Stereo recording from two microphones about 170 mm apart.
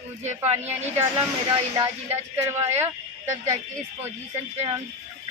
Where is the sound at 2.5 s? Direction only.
15° right (ahead or behind).